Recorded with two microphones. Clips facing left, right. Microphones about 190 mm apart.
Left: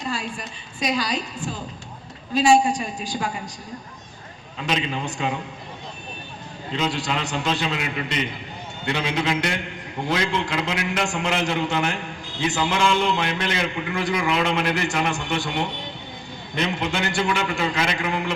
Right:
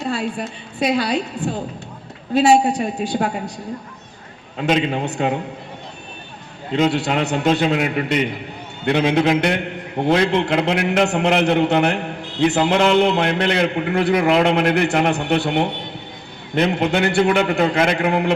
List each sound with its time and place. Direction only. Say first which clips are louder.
0.0 s a man's voice: right 7 dB; 60° right (ahead or behind)
4.5 s a man's voice: right 7 dB; 55° right (ahead or behind)
6.7 s a man's voice: right 8 dB; 60° right (ahead or behind)